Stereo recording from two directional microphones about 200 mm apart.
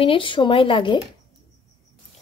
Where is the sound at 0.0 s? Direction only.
25° left (ahead or behind).